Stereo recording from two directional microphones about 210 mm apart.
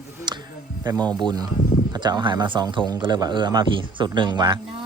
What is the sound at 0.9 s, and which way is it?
A man's voice, 20° right (ahead or behind).